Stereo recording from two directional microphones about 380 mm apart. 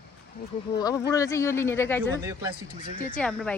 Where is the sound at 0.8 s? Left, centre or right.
Centre.